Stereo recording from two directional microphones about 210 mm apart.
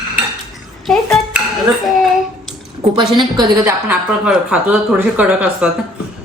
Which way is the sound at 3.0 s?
20° right (ahead or behind).